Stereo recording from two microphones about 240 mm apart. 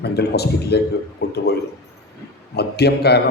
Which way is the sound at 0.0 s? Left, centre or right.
Left.